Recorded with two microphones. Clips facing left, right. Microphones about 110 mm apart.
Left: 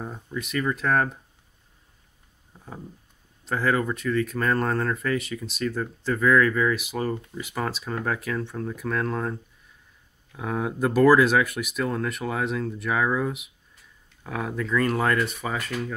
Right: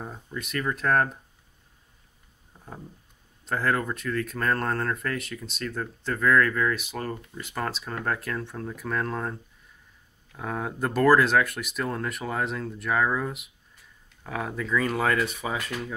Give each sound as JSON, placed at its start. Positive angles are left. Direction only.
{"t": 0.0, "sound": "speech", "side_deg": 0}
{"t": 3.4, "sound": "speech", "side_deg": 0}